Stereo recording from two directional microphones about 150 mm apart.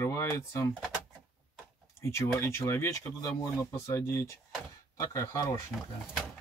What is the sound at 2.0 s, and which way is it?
Speech, 20° left (ahead or behind).